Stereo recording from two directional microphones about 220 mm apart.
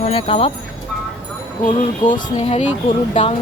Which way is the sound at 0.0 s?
25° left (ahead or behind).